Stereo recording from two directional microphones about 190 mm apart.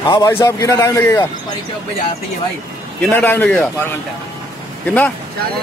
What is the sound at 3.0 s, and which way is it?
A man's voice, 10° left (ahead or behind).